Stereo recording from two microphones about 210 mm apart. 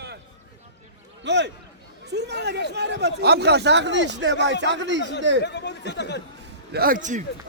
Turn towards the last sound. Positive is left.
turn(degrees=-35)  # may be behind; listen again after turning